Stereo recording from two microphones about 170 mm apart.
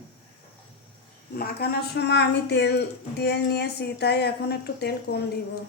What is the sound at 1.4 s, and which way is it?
Speech, 70° left (ahead or behind).